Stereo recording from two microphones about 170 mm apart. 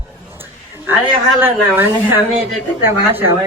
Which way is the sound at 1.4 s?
15° right (ahead or behind).